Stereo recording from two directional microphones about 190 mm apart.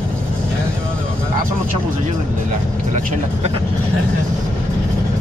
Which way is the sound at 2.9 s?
40° right (ahead or behind).